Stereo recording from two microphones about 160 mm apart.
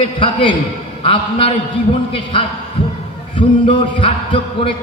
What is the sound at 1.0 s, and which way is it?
A man's voice, 35° left (ahead or behind).